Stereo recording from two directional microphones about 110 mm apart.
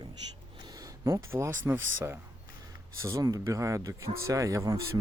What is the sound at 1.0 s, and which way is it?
Speech, 30° right (ahead or behind).